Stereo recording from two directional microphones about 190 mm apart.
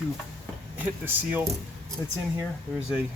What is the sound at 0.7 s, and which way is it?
Speech, 10° right (ahead or behind).